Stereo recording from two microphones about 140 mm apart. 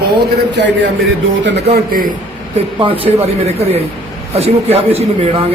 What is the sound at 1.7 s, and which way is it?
Speech, 90° right.